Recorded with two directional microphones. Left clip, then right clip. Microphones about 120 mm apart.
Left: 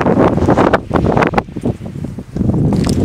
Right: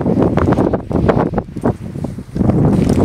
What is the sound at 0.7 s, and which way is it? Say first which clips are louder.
Wind noise: left 2 dB; 35° right (ahead or behind).